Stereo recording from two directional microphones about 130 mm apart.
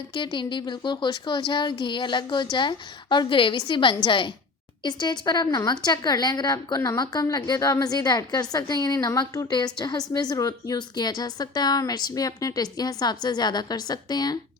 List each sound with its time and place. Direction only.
0.1 s a woman's voice: 40° left (ahead or behind)